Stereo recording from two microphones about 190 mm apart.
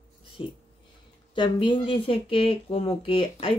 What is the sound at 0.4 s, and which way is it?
Speech, 25° left (ahead or behind).